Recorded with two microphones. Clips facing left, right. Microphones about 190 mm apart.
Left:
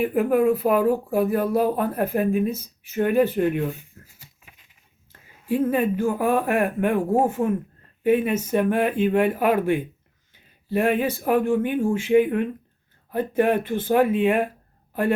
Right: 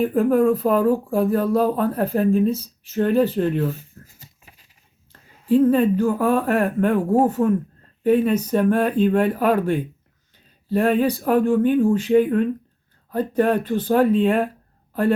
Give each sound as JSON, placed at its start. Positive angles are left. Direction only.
{"t": 0.0, "sound": "speech", "side_deg": 10}
{"t": 3.8, "sound": "a sound", "side_deg": -40}
{"t": 5.5, "sound": "speech", "side_deg": 10}